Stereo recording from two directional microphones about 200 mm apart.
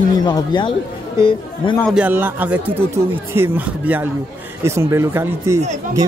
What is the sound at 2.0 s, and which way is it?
Speech, 10° right (ahead or behind).